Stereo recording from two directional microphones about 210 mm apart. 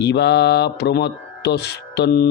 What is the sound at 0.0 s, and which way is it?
Mantra, 55° left (ahead or behind).